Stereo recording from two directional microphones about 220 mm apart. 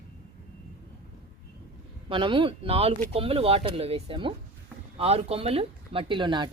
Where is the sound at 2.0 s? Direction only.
25° right (ahead or behind).